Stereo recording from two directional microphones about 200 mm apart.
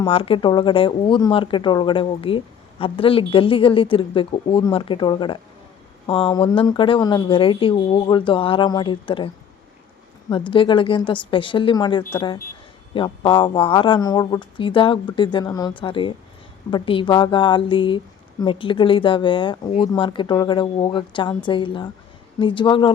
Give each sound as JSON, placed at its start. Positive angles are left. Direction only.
{"t": 0.0, "sound": "speech", "side_deg": 25}